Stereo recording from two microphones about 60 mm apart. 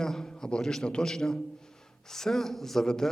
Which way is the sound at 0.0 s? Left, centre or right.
Centre.